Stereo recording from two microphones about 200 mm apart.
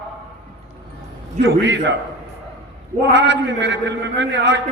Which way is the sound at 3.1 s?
60° right (ahead or behind).